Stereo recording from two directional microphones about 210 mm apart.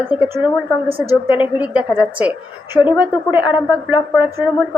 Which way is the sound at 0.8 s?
25° right (ahead or behind).